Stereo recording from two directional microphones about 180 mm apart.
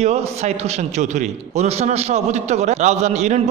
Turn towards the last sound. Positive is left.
turn(degrees=-40)  # may be behind; listen again after turning